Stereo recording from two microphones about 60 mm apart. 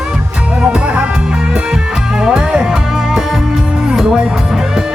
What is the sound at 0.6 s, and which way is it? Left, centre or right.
Music, centre.